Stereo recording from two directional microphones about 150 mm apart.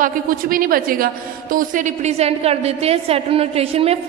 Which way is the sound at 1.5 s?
60° right (ahead or behind).